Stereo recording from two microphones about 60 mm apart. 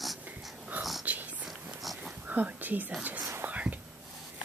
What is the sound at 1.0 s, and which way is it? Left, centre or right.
Whispering, right.